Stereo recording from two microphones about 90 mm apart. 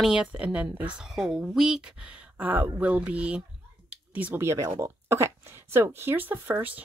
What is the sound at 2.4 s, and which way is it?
Speech, 20° right (ahead or behind).